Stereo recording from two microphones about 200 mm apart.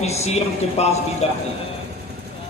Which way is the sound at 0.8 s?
35° left (ahead or behind).